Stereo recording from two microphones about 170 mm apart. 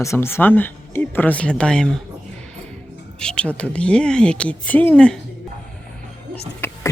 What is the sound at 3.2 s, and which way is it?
Speech, 5° left (ahead or behind).